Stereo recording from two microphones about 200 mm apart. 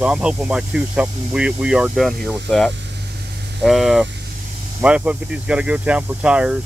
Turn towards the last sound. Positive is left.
turn(degrees=-5)  # may be behind; listen again after turning